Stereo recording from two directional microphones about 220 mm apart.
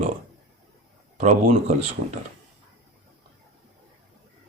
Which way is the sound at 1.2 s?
35° right (ahead or behind).